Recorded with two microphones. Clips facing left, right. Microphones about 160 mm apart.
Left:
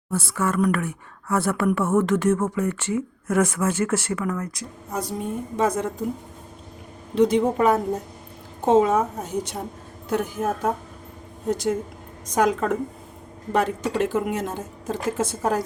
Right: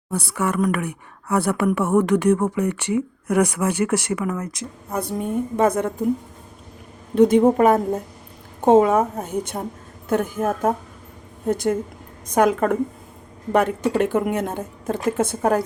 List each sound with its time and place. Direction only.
0.1 s speech: 15° right (ahead or behind)
4.9 s speech: 55° right (ahead or behind)
7.2 s a woman's voice: 50° right (ahead or behind)